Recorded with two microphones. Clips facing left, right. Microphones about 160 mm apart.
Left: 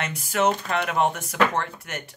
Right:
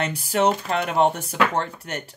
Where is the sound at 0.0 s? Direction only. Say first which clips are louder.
Right 2 dB; 30° right (ahead or behind).